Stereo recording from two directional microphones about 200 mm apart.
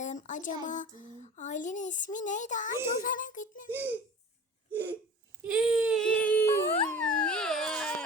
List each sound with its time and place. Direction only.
0.0 s a sound: 40° left (ahead or behind)
1.2 s speech: 35° left (ahead or behind)
3.7 s hiccup: 10° right (ahead or behind)
5.4 s dog: 5° right (ahead or behind)